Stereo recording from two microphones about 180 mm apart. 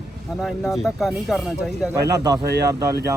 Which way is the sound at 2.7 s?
20° right (ahead or behind).